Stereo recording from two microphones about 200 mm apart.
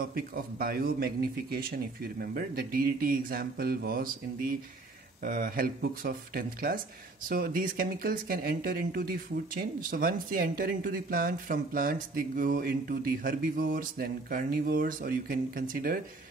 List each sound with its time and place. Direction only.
0.0 s speech: 50° right (ahead or behind)